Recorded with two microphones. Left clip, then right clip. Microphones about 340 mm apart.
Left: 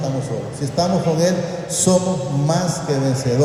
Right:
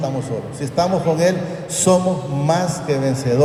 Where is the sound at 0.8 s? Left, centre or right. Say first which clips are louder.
Right 2 dB; right.